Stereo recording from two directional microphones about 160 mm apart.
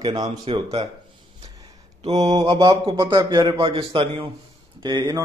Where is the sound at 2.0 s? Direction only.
35° right (ahead or behind).